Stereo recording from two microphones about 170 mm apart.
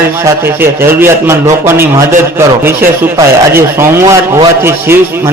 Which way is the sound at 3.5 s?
15° right (ahead or behind).